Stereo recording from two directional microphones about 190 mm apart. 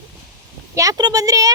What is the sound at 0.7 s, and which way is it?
Speech, 15° right (ahead or behind).